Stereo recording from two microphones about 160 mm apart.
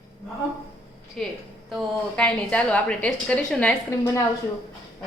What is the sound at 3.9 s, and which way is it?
Speech, 20° left (ahead or behind).